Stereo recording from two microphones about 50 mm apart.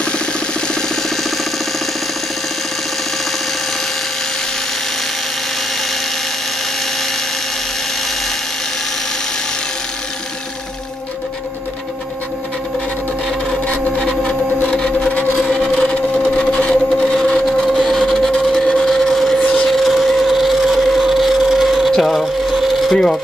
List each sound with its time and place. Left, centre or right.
16.3 s printer: centre
17.0 s printer: centre
17.6 s a sound: centre
19.4 s vehicle: centre
19.7 s vehicle: centre
21.9 s sewing machine: centre